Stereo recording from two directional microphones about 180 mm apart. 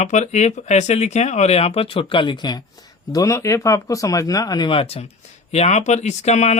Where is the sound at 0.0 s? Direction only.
40° left (ahead or behind).